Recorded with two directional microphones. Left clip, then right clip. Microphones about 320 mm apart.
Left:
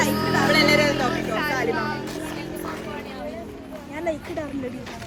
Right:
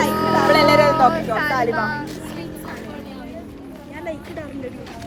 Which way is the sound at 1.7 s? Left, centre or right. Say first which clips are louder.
Right 4 dB; right.